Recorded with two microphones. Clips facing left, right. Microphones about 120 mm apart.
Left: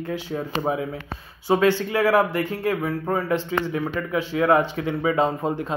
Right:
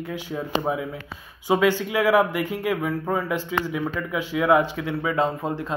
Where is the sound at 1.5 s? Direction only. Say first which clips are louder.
Left 1 dB; 10° right (ahead or behind).